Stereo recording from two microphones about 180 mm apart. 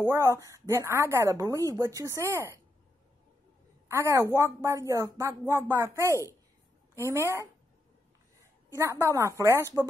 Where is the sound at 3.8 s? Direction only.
15° right (ahead or behind).